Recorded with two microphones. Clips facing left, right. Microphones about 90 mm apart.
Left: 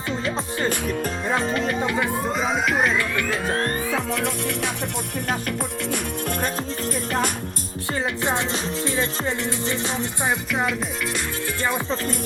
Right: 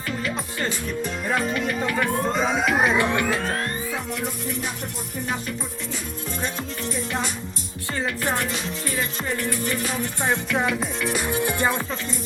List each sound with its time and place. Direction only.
1.3 s music: 30° left (ahead or behind)
1.8 s music: 20° left (ahead or behind)
2.1 s music: 5° left (ahead or behind)
2.9 s music: 25° right (ahead or behind)
4.1 s music: 90° left
5.3 s music: 65° left (ahead or behind)
7.9 s music: 20° left (ahead or behind)
10.5 s music: centre (ahead or behind)
11.3 s music: 15° right (ahead or behind)